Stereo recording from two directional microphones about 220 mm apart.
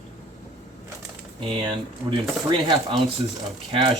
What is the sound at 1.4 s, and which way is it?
Speech, 25° right (ahead or behind).